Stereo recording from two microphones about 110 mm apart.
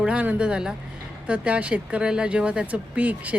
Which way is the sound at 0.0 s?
10° right (ahead or behind).